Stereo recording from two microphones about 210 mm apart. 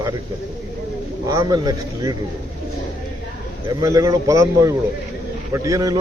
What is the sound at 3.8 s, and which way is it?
A man's voice, 15° right (ahead or behind).